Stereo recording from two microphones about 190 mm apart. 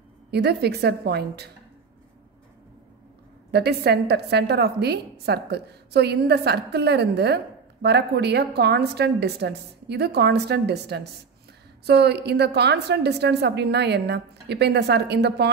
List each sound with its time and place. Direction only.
0.3 s a woman's voice: 60° right (ahead or behind)
3.5 s a woman's voice: 60° right (ahead or behind)